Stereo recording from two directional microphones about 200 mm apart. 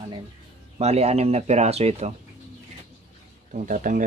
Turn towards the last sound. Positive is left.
turn(degrees=-40)  # may be behind; listen again after turning